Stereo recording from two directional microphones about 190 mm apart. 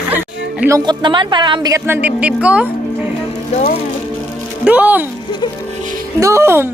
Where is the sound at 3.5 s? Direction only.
40° left (ahead or behind).